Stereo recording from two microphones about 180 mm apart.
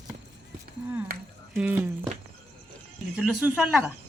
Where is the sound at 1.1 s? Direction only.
55° right (ahead or behind).